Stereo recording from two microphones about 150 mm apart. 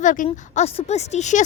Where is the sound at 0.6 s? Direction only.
45° left (ahead or behind).